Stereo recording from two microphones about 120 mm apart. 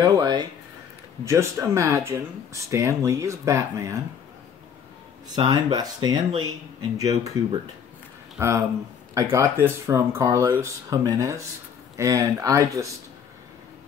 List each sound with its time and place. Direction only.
0.0 s a sound: 35° right (ahead or behind)
1.2 s speech: 25° right (ahead or behind)
5.3 s speech: 35° right (ahead or behind)
8.4 s speech: 25° right (ahead or behind)